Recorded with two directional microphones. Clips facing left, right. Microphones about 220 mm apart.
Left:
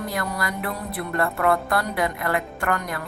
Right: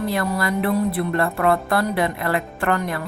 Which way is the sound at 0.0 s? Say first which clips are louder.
Right 5 dB; 30° right (ahead or behind).